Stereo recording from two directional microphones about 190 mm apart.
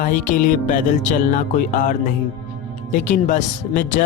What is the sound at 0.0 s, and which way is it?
Speech, 45° left (ahead or behind).